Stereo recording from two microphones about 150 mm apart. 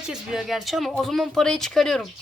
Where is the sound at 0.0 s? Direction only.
5° right (ahead or behind).